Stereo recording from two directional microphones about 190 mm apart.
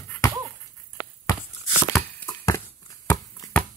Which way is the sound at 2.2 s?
15° left (ahead or behind).